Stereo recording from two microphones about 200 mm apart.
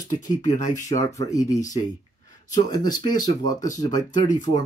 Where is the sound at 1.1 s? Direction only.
15° left (ahead or behind).